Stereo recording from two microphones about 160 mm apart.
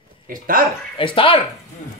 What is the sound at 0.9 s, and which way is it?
Speech, 35° left (ahead or behind).